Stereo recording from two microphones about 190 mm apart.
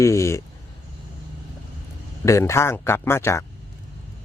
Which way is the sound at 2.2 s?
15° left (ahead or behind).